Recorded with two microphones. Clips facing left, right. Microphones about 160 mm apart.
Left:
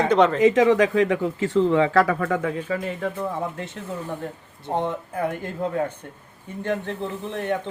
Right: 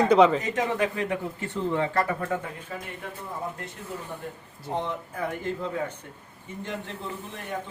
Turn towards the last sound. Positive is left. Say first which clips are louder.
# left 9 dB
turn(degrees=65)  # may be behind; listen again after turning